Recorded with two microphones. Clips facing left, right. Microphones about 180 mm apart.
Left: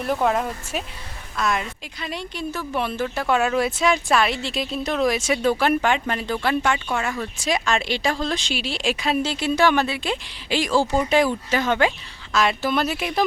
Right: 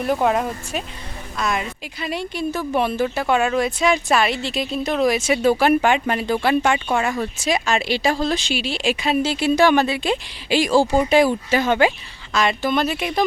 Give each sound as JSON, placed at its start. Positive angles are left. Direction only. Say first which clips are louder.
{"t": 0.0, "sound": "speech", "louder": "right 2 dB", "side_deg": 0}
{"t": 3.2, "sound": "speech", "louder": "even", "side_deg": 0}
{"t": 7.3, "sound": "speech", "louder": "left 1 dB", "side_deg": 0}
{"t": 12.3, "sound": "speech", "louder": "right 1 dB", "side_deg": 0}